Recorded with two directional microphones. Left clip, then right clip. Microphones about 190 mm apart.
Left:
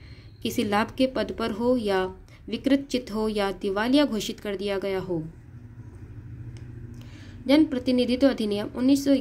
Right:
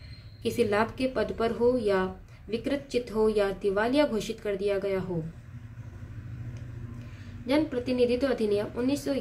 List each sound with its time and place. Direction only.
0.4 s a woman's voice: 35° left (ahead or behind)
7.4 s a woman's voice: 35° left (ahead or behind)